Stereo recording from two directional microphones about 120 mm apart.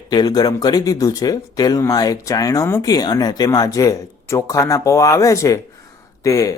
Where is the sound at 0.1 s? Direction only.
35° left (ahead or behind).